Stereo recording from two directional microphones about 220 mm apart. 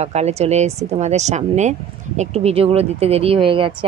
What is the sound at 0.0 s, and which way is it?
Speech, 30° right (ahead or behind).